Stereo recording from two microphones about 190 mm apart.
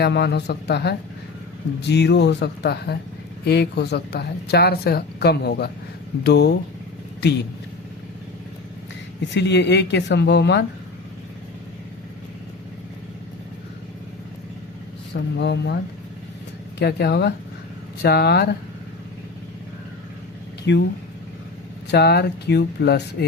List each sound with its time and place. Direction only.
0.0 s speech: 60° left (ahead or behind)
9.3 s speech: 65° left (ahead or behind)
15.1 s speech: 65° left (ahead or behind)
20.7 s speech: 70° left (ahead or behind)
21.8 s speech: 60° left (ahead or behind)